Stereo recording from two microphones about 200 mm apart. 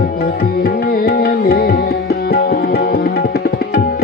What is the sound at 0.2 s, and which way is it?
Music, 50° left (ahead or behind).